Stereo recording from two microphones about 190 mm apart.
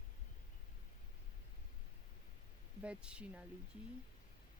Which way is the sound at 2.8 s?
5° right (ahead or behind).